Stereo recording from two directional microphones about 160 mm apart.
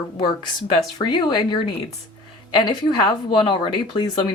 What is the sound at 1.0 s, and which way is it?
Speech, 30° left (ahead or behind).